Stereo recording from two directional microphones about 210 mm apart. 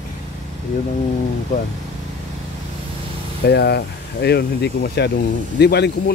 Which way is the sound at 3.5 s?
50° left (ahead or behind).